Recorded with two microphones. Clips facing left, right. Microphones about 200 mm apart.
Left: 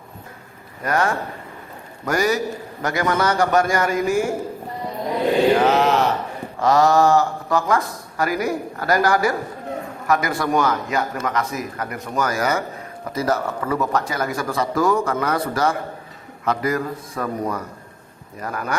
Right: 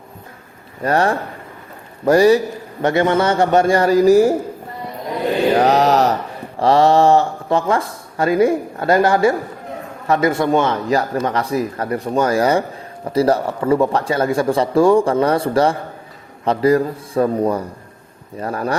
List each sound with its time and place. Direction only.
0.8 s speech: 30° right (ahead or behind)
5.5 s mantra: 40° right (ahead or behind)
6.6 s speech: 30° right (ahead or behind)